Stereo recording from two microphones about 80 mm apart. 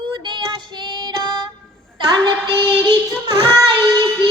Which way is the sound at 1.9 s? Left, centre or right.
Right.